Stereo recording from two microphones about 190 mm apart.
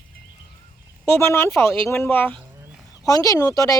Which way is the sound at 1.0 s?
15° left (ahead or behind).